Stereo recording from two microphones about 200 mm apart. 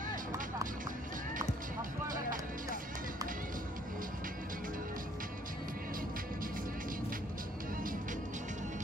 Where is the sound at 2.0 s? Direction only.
40° right (ahead or behind).